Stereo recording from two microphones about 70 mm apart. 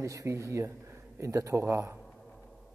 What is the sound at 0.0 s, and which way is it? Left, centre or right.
A man's voice, right.